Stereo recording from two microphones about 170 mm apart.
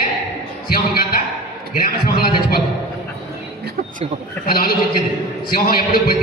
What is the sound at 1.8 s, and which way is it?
Speech, 60° left (ahead or behind).